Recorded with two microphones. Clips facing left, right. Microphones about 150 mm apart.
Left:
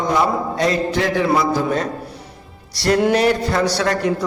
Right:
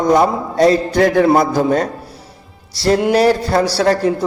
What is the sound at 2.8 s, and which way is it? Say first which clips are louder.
Music: right 2 dB; 25° right (ahead or behind).